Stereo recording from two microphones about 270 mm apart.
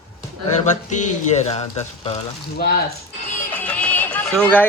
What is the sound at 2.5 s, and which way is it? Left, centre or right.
Speech, left.